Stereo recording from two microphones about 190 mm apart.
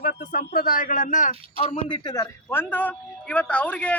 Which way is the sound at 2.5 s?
10° left (ahead or behind).